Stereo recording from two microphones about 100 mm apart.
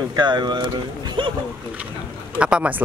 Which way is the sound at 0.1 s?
45° right (ahead or behind).